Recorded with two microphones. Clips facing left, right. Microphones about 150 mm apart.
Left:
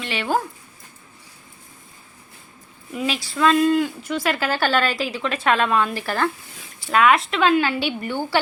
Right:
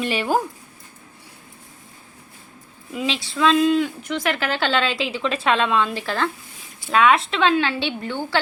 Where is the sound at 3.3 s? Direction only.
5° left (ahead or behind).